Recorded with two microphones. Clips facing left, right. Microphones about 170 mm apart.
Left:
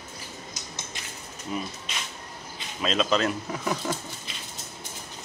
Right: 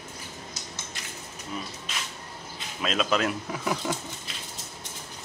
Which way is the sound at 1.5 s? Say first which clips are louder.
Left 4 dB; 15° left (ahead or behind).